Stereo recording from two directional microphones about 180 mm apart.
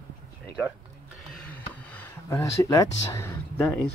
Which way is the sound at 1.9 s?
15° left (ahead or behind).